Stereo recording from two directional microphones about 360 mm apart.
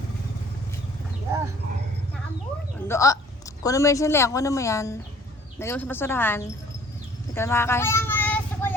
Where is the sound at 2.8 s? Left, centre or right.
Centre.